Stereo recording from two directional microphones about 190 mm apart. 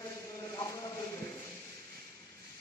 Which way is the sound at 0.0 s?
20° left (ahead or behind).